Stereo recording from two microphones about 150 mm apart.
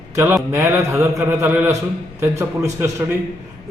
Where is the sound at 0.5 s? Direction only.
15° right (ahead or behind).